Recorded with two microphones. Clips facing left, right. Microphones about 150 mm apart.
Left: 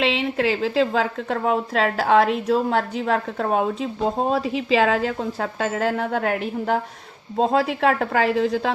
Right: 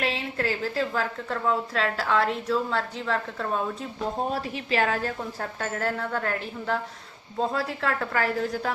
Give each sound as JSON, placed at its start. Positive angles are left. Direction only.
{"t": 0.0, "sound": "speech", "side_deg": 90}